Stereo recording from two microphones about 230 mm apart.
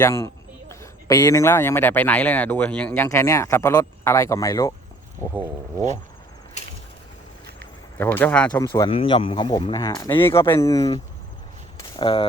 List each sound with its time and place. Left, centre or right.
0.0 s a man's voice: centre
7.9 s a man's voice: centre
8.9 s a man's voice: left